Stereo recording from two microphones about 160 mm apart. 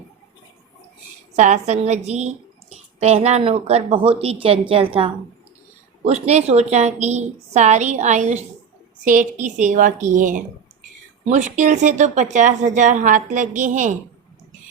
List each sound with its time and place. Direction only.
1.4 s speech: 45° right (ahead or behind)